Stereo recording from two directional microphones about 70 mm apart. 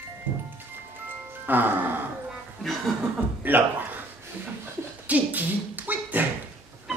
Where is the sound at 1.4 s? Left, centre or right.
Right.